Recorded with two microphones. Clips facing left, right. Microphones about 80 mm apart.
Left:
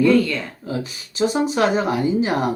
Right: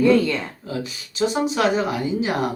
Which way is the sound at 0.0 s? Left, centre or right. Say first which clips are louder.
Left 1 dB; right.